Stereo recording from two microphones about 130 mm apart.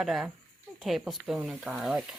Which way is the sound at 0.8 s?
Centre (ahead or behind).